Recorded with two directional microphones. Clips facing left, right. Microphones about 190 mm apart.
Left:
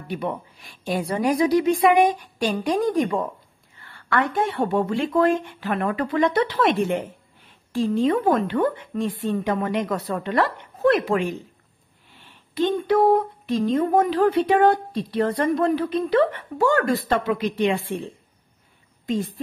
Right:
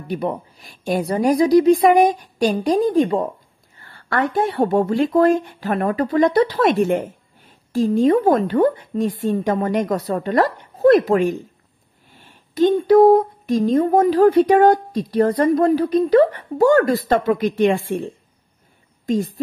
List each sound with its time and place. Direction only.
0.1 s speech: 40° right (ahead or behind)
19.0 s speech: 40° right (ahead or behind)